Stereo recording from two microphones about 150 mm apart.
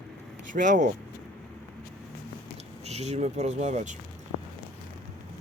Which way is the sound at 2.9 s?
45° right (ahead or behind).